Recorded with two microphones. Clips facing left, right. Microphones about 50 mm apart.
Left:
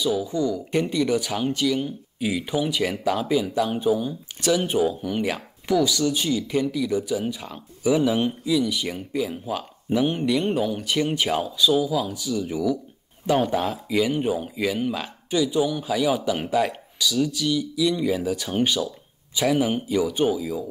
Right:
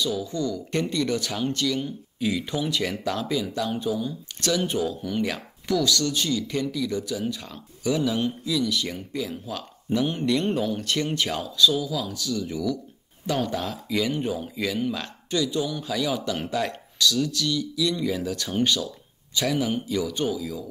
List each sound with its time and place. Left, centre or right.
0.0 s speech: centre